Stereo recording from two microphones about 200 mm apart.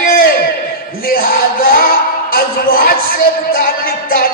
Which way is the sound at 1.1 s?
45° left (ahead or behind).